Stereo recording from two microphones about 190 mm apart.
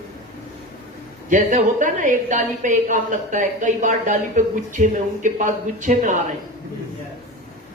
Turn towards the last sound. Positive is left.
turn(degrees=-40)  # may be behind; listen again after turning